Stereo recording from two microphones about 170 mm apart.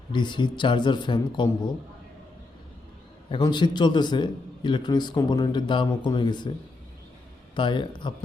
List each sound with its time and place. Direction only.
0.1 s a man's voice: 25° left (ahead or behind)
3.2 s a man's voice: 25° left (ahead or behind)
7.5 s a man's voice: 30° left (ahead or behind)